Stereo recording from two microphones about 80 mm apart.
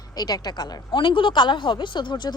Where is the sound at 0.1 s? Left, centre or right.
Left.